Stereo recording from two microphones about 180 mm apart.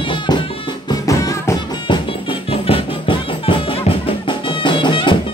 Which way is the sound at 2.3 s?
30° left (ahead or behind).